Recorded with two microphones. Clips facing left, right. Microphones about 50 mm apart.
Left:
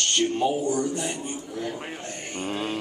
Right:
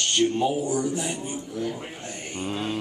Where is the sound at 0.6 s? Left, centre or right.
Centre.